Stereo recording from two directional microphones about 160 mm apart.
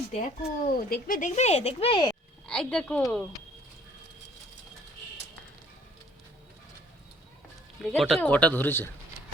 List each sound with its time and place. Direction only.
0.1 s speech: 40° left (ahead or behind)
0.9 s speech: 60° left (ahead or behind); by 2.0 s 35° left (ahead or behind)
2.5 s a woman's voice: 5° left (ahead or behind)
7.8 s a man's voice: centre (ahead or behind)